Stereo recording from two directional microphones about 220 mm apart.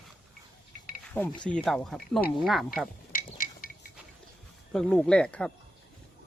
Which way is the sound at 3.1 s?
40° left (ahead or behind).